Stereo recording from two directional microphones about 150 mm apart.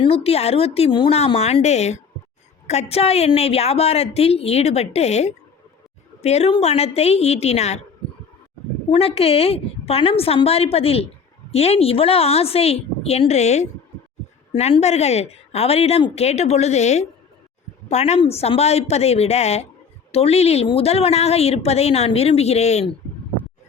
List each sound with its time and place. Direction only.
0.0 s a woman's voice: 40° left (ahead or behind)
8.9 s a woman's voice: 40° left (ahead or behind)